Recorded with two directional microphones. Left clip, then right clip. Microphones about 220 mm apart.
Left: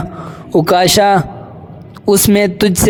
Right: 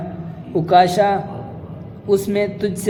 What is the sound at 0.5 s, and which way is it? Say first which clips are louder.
Speech: left 3 dB; 45° left (ahead or behind).